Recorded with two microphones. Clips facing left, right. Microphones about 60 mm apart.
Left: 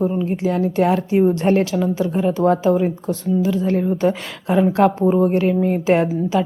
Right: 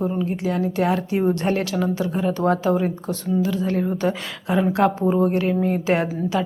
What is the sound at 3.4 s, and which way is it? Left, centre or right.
A woman's voice, left.